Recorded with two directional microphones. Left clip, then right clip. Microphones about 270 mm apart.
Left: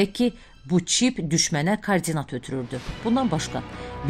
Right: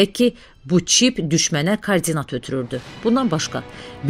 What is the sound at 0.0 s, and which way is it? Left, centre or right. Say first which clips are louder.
A man's voice: right 7 dB; centre.